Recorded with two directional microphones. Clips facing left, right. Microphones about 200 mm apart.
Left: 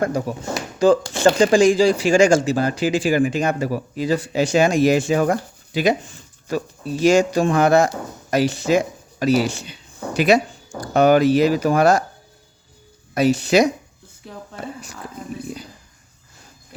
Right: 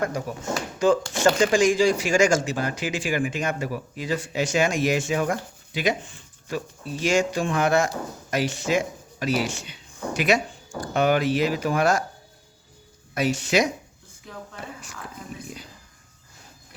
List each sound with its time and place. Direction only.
0.0 s speech: 35° left (ahead or behind)
13.1 s speech: 35° left (ahead or behind)